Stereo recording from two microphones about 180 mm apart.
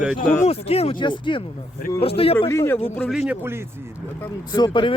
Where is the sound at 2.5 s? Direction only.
15° left (ahead or behind).